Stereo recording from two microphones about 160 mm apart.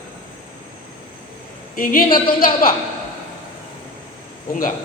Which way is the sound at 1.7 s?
60° left (ahead or behind).